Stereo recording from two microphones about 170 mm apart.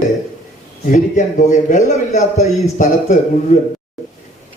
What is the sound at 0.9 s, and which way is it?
Speech, 45° left (ahead or behind).